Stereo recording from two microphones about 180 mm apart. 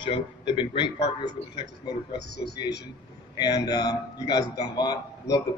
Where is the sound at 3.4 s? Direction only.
20° left (ahead or behind).